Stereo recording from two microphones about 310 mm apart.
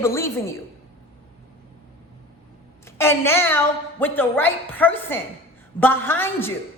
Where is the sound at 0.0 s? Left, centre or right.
Centre.